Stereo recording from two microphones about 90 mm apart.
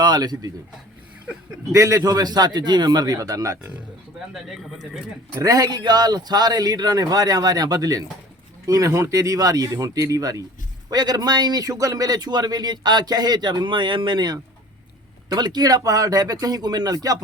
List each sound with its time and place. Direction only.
0.0 s speech: 50° right (ahead or behind)
1.7 s a man's voice: 35° right (ahead or behind)
4.4 s speech: centre (ahead or behind)
5.4 s a man's voice: 40° right (ahead or behind)